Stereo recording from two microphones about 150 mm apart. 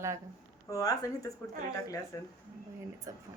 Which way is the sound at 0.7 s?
25° left (ahead or behind).